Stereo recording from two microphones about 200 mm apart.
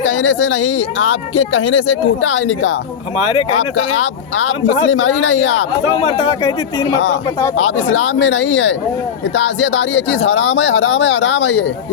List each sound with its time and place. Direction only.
0.0 s speech: 70° left (ahead or behind)
4.0 s speech: 70° left (ahead or behind)
6.4 s speech: 15° left (ahead or behind)
7.5 s speech: 75° left (ahead or behind)